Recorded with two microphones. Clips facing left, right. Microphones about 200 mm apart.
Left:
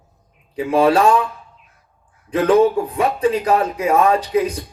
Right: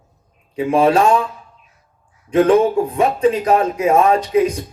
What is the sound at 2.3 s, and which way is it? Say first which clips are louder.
Speech: right 1 dB; 30° right (ahead or behind).